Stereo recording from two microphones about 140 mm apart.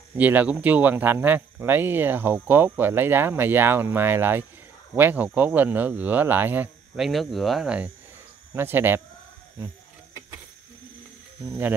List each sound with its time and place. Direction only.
0.2 s cricket: 10° right (ahead or behind)
7.0 s speech: centre (ahead or behind)
8.5 s cricket: 15° right (ahead or behind)
11.4 s speech: 5° right (ahead or behind)